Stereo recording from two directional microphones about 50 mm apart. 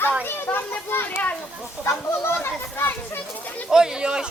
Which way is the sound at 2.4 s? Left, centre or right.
Left.